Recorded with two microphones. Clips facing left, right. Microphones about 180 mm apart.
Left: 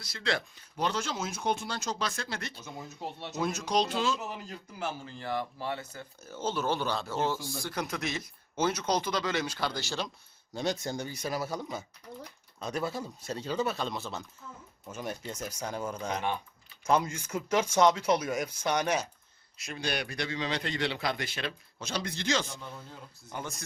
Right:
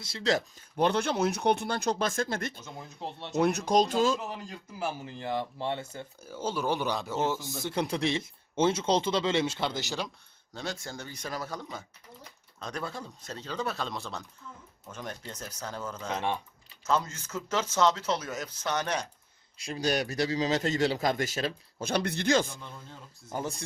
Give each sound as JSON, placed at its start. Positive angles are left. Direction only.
{"t": 0.2, "sound": "speech", "side_deg": -40}
{"t": 2.6, "sound": "speech", "side_deg": 5}
{"t": 3.4, "sound": "speech", "side_deg": -60}
{"t": 4.8, "sound": "speech", "side_deg": -15}
{"t": 6.2, "sound": "speech", "side_deg": -10}
{"t": 10.5, "sound": "speech", "side_deg": 20}
{"t": 16.1, "sound": "speech", "side_deg": -25}
{"t": 16.8, "sound": "speech", "side_deg": 15}
{"t": 19.5, "sound": "a man's voice", "side_deg": -30}
{"t": 23.3, "sound": "a man's voice", "side_deg": -35}